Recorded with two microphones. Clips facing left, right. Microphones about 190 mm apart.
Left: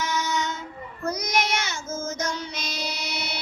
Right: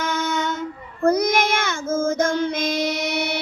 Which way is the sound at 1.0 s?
55° right (ahead or behind).